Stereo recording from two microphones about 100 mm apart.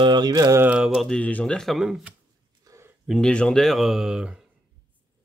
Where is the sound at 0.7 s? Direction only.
5° right (ahead or behind).